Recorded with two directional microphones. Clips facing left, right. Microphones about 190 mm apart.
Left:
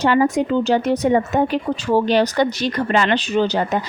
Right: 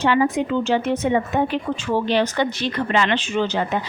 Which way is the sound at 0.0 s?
40° left (ahead or behind).